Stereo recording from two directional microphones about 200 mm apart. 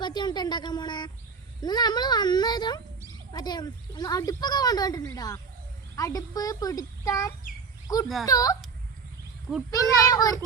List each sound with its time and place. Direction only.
0.0 s a child's voice: 20° left (ahead or behind)
9.6 s a child's voice: 20° left (ahead or behind)